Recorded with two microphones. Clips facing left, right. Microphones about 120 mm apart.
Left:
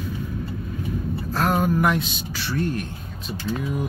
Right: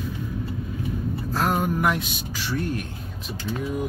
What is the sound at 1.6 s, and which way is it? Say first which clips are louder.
A man's voice: left 3 dB; 10° right (ahead or behind).